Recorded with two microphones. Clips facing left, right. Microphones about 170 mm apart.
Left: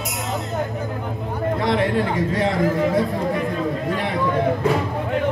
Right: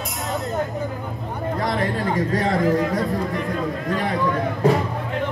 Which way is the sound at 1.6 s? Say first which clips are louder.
Left 3 dB; 40° right (ahead or behind).